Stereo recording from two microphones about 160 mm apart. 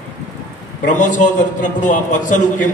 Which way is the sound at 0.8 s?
50° left (ahead or behind).